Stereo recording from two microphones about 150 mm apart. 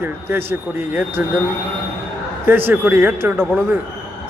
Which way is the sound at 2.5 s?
15° right (ahead or behind).